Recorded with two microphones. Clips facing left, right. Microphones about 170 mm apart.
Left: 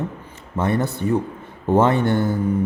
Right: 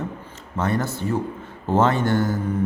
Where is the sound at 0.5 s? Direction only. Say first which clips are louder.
Left 2 dB; 20° left (ahead or behind).